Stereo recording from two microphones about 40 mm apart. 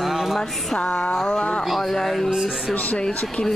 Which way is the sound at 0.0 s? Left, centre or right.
Centre.